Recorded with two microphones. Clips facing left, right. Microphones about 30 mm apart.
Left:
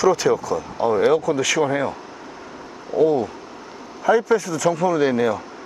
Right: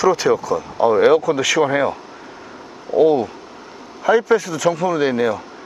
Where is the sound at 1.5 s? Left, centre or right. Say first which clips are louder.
Right 6 dB; right.